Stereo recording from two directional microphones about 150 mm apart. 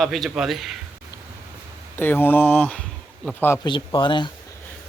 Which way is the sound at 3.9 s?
30° left (ahead or behind).